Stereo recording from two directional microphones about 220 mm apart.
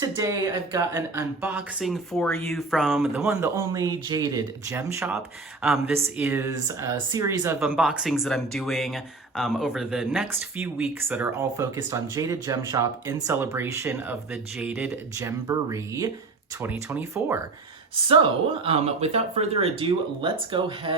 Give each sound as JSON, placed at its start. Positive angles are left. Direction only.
{"t": 0.0, "sound": "speech", "side_deg": -15}
{"t": 5.6, "sound": "speech", "side_deg": 0}
{"t": 6.1, "sound": "speech", "side_deg": -10}
{"t": 18.1, "sound": "speech", "side_deg": -25}